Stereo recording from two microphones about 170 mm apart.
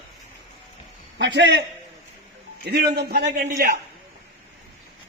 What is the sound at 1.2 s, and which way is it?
Speech, 90° right.